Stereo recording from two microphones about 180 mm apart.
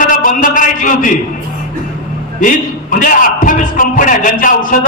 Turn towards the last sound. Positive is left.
turn(degrees=50)  # may be behind; listen again after turning